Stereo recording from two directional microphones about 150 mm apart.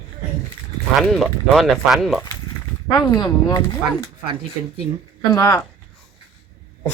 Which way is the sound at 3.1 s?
30° left (ahead or behind).